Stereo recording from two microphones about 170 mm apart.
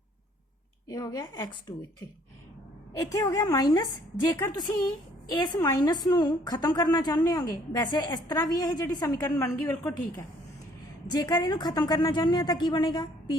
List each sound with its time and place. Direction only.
0.9 s a woman's voice: 20° left (ahead or behind)
2.9 s a woman's voice: 20° left (ahead or behind)
11.1 s a woman's voice: 25° left (ahead or behind)